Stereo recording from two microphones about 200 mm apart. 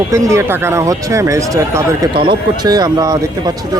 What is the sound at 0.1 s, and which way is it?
Speech, 15° right (ahead or behind).